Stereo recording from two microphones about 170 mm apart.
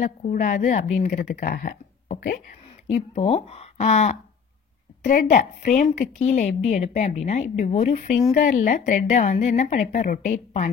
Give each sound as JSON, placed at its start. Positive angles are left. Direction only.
{"t": 0.0, "sound": "a woman's voice", "side_deg": 50}
{"t": 3.2, "sound": "a woman's voice", "side_deg": 40}